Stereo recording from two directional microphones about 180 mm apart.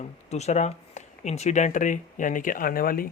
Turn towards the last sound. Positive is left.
turn(degrees=55)  # may be behind; listen again after turning